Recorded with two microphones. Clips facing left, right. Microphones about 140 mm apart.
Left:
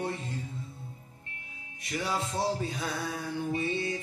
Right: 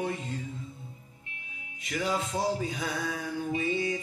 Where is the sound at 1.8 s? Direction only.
15° right (ahead or behind).